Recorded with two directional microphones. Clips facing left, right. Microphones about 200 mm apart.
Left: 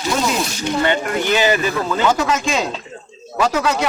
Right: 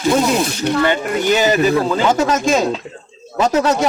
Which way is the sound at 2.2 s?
40° right (ahead or behind).